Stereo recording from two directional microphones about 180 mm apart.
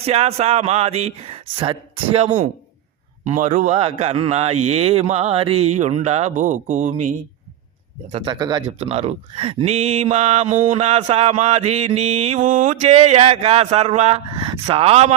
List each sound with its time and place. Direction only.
0.0 s speech: 35° right (ahead or behind)
8.1 s speech: 25° right (ahead or behind)
8.8 s speech: 35° right (ahead or behind)